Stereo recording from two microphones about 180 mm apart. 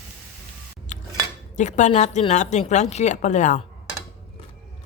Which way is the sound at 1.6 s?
40° left (ahead or behind).